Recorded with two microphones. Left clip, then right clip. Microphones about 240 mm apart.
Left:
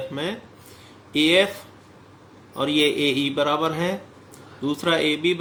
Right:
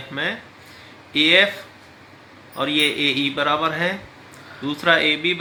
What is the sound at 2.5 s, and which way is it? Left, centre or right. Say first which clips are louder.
Speech: right 1 dB; centre.